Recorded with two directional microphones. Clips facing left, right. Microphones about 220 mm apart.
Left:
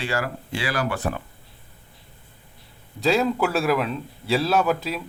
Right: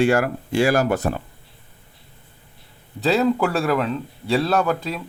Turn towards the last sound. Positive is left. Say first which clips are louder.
# right 1 dB
turn(degrees=5)  # may be behind; listen again after turning